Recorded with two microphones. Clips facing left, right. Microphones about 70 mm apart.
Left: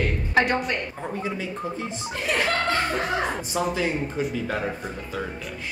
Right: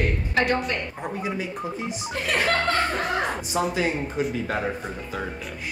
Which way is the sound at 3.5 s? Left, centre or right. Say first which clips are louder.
Right 2 dB; centre.